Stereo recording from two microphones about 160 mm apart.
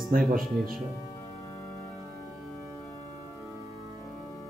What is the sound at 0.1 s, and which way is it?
Speech, 60° right (ahead or behind).